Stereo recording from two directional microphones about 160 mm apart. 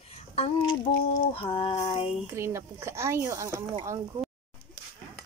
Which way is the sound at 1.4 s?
35° left (ahead or behind).